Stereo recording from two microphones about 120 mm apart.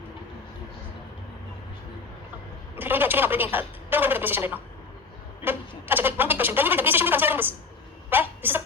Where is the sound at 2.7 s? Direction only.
15° right (ahead or behind).